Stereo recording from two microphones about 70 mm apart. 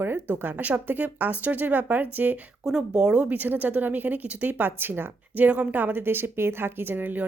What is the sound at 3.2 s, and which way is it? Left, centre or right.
Speech, right.